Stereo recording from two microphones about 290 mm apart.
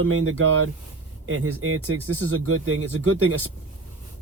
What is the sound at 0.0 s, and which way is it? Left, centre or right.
Speech, right.